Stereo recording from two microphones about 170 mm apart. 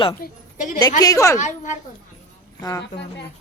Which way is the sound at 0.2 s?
50° left (ahead or behind).